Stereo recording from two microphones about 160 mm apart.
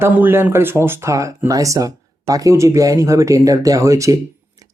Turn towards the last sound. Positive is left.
turn(degrees=-20)  # may be behind; listen again after turning